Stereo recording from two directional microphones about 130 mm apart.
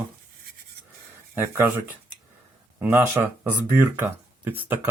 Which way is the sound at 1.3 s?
15° right (ahead or behind).